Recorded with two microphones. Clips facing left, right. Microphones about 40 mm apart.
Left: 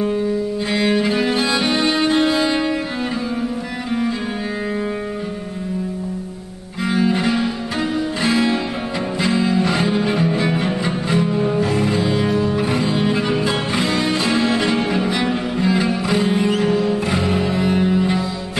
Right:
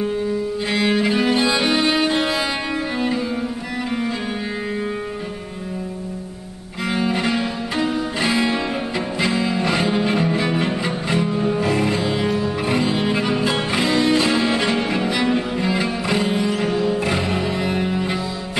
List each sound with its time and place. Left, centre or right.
0.7 s music: centre
6.9 s cello: centre
9.2 s music: centre
14.9 s cello: centre
16.5 s music: centre